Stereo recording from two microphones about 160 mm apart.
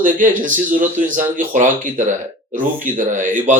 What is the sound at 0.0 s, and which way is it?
Speech, 55° right (ahead or behind).